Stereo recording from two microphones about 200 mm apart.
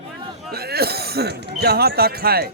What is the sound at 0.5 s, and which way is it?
Speech, 50° right (ahead or behind).